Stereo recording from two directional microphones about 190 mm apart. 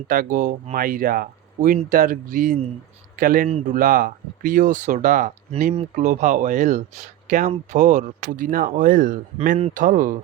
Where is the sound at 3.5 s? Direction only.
30° right (ahead or behind).